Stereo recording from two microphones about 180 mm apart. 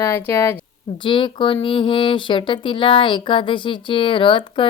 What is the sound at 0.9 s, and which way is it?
Speech, 25° left (ahead or behind).